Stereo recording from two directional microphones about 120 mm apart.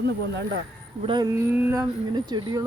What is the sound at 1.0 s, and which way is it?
Speech, 40° right (ahead or behind).